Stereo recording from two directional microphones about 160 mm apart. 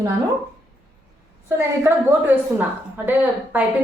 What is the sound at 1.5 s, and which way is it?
A woman's voice, 15° right (ahead or behind).